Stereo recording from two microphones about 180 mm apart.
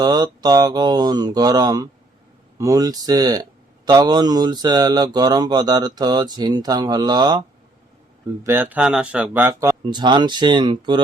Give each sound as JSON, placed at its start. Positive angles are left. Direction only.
{"t": 0.0, "sound": "speech", "side_deg": -20}
{"t": 8.4, "sound": "speech", "side_deg": -10}